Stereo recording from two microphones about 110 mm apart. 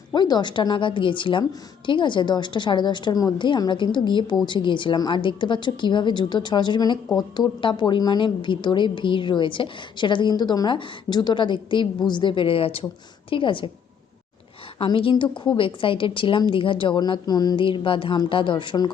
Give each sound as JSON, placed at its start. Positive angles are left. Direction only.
{"t": 0.1, "sound": "a woman's voice", "side_deg": 40}
{"t": 14.8, "sound": "a woman's voice", "side_deg": 45}
{"t": 17.7, "sound": "a woman's voice", "side_deg": 50}